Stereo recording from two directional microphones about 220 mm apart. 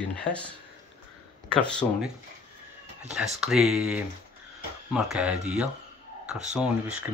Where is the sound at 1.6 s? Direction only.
5° left (ahead or behind).